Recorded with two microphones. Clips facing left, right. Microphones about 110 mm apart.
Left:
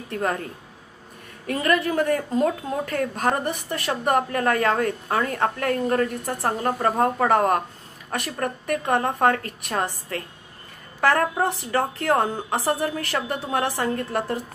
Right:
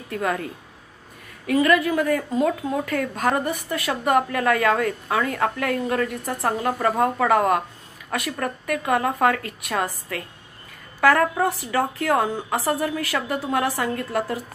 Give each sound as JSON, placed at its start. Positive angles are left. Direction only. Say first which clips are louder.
{"t": 0.1, "sound": "a woman's voice", "louder": "right 1 dB", "side_deg": 35}
{"t": 1.5, "sound": "a woman's voice", "louder": "right 3 dB", "side_deg": 40}